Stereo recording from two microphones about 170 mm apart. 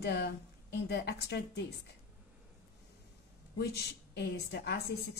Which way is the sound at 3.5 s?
70° left (ahead or behind).